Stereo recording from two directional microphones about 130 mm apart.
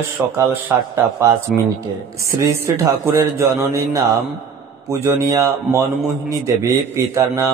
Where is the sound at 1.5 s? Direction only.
Centre (ahead or behind).